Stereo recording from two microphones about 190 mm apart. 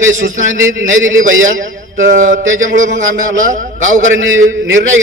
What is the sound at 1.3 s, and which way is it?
Speech, 90° right.